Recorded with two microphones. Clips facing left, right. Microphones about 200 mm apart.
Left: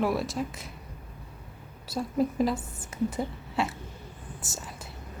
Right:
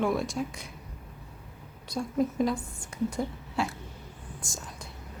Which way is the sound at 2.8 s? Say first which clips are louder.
Left 1 dB; 5° left (ahead or behind).